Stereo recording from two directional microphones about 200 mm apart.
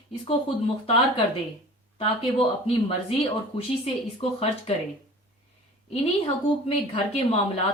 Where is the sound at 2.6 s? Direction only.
30° left (ahead or behind).